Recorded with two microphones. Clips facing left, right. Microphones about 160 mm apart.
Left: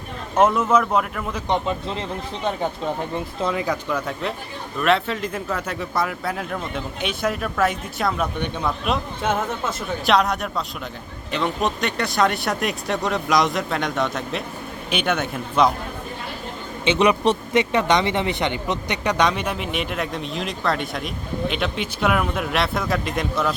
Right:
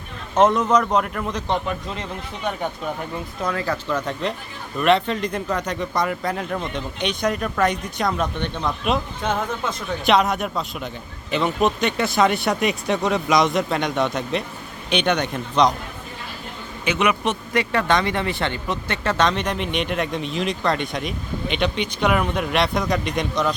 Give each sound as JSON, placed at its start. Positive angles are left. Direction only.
{"t": 0.3, "sound": "speech", "side_deg": 5}
{"t": 1.5, "sound": "speech", "side_deg": 25}
{"t": 3.4, "sound": "speech", "side_deg": 15}
{"t": 16.8, "sound": "speech", "side_deg": 30}